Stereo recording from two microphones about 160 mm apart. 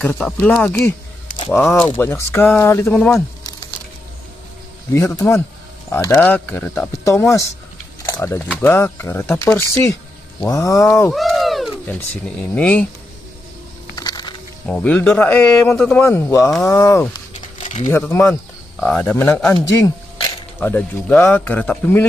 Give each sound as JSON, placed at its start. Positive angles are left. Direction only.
{"t": 0.0, "sound": "speech", "side_deg": 5}
{"t": 4.9, "sound": "speech", "side_deg": 20}
{"t": 11.1, "sound": "a sound", "side_deg": 0}
{"t": 11.8, "sound": "speech", "side_deg": 10}
{"t": 13.9, "sound": "a sound", "side_deg": 25}
{"t": 14.7, "sound": "speech", "side_deg": 10}
{"t": 20.5, "sound": "speech", "side_deg": 10}